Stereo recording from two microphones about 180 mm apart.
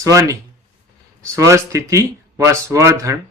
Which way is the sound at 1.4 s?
15° right (ahead or behind).